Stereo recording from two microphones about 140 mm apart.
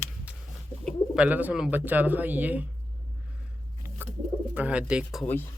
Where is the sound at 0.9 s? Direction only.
5° right (ahead or behind).